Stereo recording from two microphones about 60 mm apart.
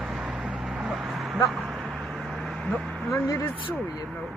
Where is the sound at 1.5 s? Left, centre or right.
Centre.